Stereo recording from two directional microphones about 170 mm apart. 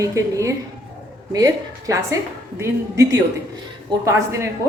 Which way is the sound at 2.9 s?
90° right.